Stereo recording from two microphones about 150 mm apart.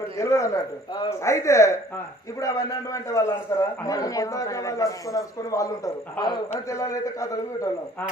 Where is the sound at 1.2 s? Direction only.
20° left (ahead or behind).